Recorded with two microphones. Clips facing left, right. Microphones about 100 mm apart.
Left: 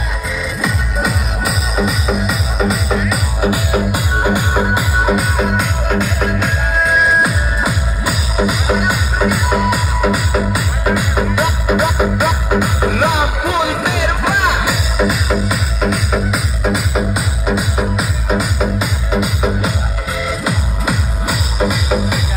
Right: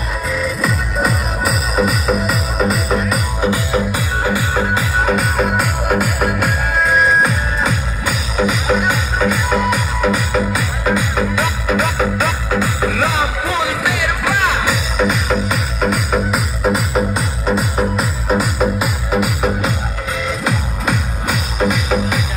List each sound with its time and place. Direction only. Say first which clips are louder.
0.4 s music: even; centre (ahead or behind)
3.3 s music: left 1 dB; 15° left (ahead or behind)
5.1 s music: even; centre (ahead or behind)